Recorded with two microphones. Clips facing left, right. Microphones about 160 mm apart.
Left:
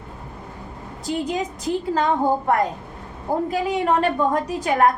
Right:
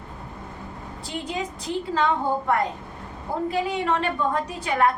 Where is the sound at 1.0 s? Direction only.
45° left (ahead or behind).